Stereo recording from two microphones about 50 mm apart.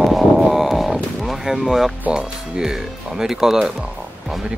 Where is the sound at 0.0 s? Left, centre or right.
Centre.